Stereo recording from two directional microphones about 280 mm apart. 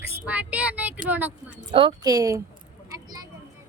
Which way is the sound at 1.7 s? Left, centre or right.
Centre.